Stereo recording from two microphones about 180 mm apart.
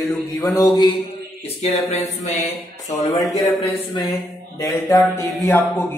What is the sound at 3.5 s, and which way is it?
Speech, 25° left (ahead or behind).